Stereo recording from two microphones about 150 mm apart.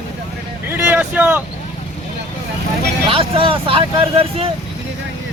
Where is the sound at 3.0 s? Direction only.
35° right (ahead or behind).